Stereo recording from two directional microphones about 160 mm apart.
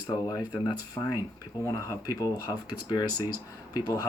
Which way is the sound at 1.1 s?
15° right (ahead or behind).